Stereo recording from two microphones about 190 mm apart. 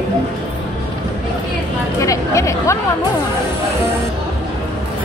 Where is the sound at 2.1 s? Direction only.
15° left (ahead or behind).